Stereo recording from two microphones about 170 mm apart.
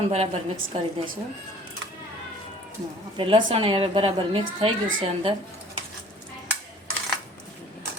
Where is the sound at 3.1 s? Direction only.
30° right (ahead or behind).